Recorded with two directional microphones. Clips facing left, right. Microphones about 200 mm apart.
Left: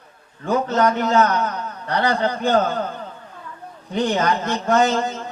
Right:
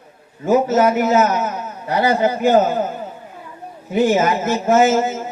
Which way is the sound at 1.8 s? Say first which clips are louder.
Right 4 dB; 5° right (ahead or behind).